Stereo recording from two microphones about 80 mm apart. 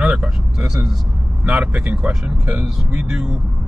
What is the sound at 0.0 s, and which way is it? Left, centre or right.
Vehicle, centre.